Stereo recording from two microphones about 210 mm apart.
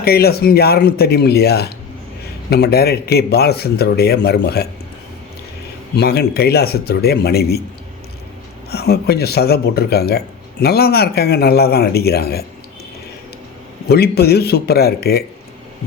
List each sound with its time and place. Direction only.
0.0 s speech: 50° left (ahead or behind)
6.0 s speech: 50° left (ahead or behind)
8.7 s speech: 50° left (ahead or behind)
13.8 s speech: 50° left (ahead or behind)